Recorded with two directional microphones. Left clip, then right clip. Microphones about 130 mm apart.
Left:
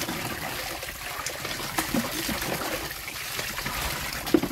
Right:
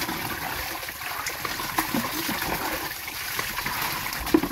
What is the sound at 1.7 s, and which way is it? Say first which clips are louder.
Water: right 1 dB; 40° left (ahead or behind).